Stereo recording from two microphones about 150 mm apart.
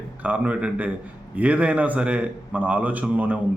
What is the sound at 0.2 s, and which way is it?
Speech, 10° right (ahead or behind).